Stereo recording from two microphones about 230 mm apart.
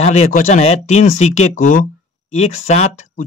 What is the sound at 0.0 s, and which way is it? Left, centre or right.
Speech, left.